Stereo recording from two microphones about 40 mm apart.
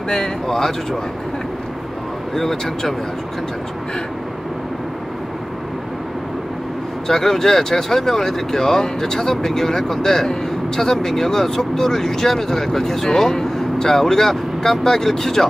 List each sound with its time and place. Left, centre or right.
0.1 s speech: centre
2.5 s speech: centre
7.1 s speech: centre